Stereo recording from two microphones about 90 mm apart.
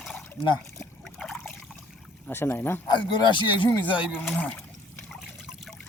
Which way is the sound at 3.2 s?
65° left (ahead or behind).